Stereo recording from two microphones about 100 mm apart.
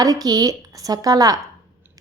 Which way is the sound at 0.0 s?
40° right (ahead or behind).